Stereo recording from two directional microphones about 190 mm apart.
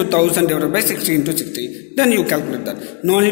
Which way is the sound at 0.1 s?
10° right (ahead or behind).